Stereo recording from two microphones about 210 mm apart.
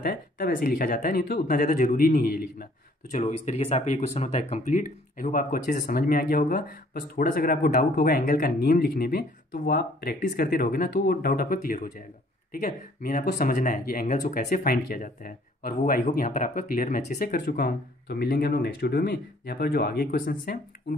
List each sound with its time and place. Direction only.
0.0 s speech: 40° left (ahead or behind)
3.1 s speech: 35° left (ahead or behind)